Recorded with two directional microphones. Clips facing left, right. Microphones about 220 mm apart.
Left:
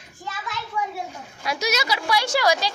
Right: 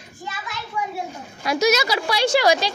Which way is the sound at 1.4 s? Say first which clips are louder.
Right 6 dB; 45° right (ahead or behind).